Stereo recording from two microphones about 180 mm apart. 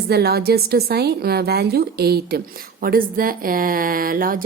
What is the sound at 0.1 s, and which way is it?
A woman's voice, 60° right (ahead or behind).